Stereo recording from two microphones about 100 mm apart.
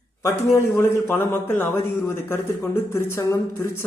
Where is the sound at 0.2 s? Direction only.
25° left (ahead or behind).